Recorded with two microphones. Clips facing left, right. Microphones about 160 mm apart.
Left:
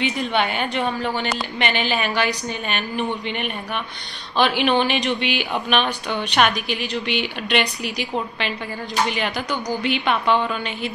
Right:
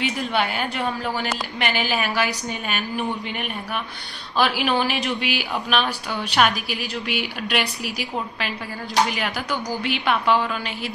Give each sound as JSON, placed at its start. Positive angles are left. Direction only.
{"t": 0.2, "sound": "a woman's voice", "side_deg": -5}